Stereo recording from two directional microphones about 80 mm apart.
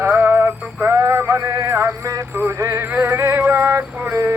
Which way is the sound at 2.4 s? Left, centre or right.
Right.